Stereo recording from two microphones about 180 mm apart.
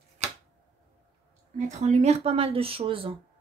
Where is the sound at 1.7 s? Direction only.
40° right (ahead or behind).